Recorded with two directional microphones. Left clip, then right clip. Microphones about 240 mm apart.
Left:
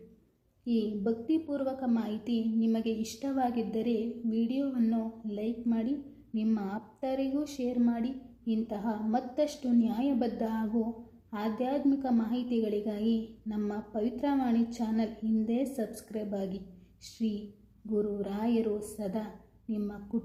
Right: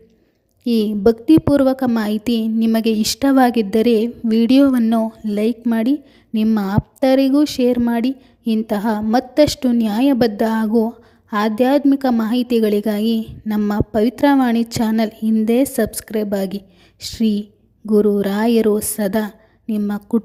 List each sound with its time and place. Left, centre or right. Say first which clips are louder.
0.6 s a woman's voice: right 17 dB; right